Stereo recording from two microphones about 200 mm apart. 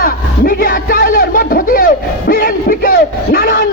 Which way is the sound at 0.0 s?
45° left (ahead or behind).